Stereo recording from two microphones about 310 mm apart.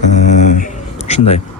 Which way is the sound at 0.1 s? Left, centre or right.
Left.